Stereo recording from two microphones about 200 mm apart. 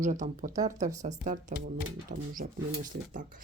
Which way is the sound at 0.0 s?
40° right (ahead or behind).